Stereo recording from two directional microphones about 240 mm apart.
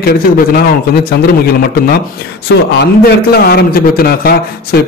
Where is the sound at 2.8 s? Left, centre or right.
Left.